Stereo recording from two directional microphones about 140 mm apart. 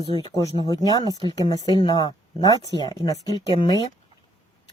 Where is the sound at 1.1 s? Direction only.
30° right (ahead or behind).